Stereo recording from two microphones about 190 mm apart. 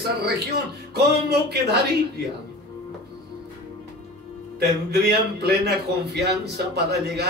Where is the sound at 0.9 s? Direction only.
60° right (ahead or behind).